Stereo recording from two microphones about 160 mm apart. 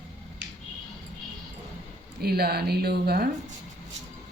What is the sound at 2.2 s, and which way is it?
Speech, 80° right.